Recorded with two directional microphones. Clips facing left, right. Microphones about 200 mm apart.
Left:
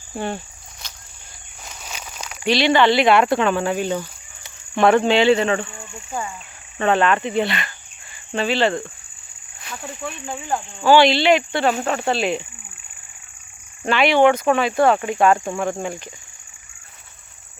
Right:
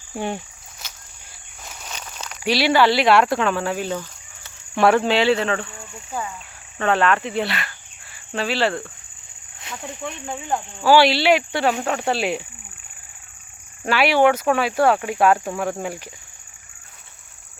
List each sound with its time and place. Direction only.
0.2 s speech: 15° right (ahead or behind)
1.6 s a sound: 10° left (ahead or behind)
2.4 s speech: 10° right (ahead or behind); by 4.5 s 10° left (ahead or behind)
4.7 s speech: 5° right (ahead or behind)
9.6 s cricket: 20° right (ahead or behind)
10.2 s speech: 5° left (ahead or behind)
10.8 s speech: 5° right (ahead or behind)
13.8 s speech: 5° right (ahead or behind)